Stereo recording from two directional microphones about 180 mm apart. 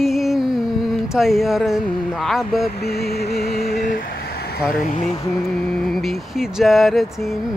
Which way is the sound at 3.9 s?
55° left (ahead or behind).